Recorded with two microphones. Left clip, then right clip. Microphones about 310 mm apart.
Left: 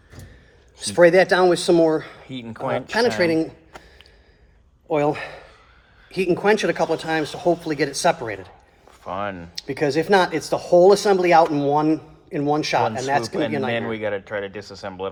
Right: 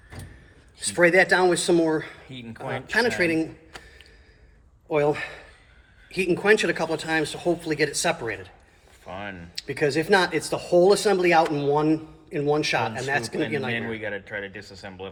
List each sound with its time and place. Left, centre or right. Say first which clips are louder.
0.9 s speech: left 4 dB; left
4.9 s speech: left 2 dB; left
9.0 s speech: left 8 dB; centre
9.6 s speech: left 2 dB; left
14.7 s speech: left 7 dB; left